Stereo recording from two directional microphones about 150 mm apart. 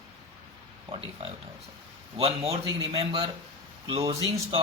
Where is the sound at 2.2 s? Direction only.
40° right (ahead or behind).